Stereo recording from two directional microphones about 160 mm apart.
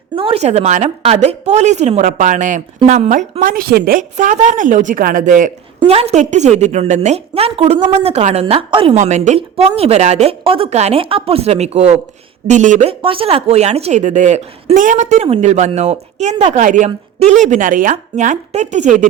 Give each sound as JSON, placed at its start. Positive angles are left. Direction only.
{"t": 0.2, "sound": "speech", "side_deg": -35}
{"t": 5.9, "sound": "a woman's voice", "side_deg": -40}
{"t": 9.0, "sound": "a woman's voice", "side_deg": -50}
{"t": 12.9, "sound": "speech", "side_deg": -35}